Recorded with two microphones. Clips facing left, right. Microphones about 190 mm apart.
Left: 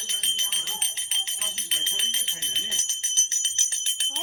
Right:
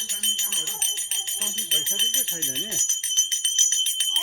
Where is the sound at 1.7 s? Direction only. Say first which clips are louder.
Right 6 dB; 45° right (ahead or behind).